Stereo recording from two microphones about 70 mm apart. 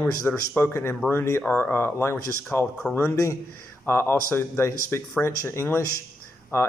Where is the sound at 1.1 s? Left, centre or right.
Left.